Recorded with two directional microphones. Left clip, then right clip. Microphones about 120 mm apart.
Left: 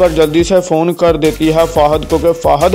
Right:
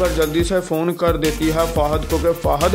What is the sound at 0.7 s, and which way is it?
Speech, 45° left (ahead or behind).